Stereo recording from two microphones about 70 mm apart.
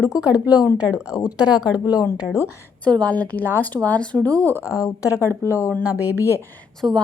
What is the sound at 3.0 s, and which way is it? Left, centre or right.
A woman's voice, left.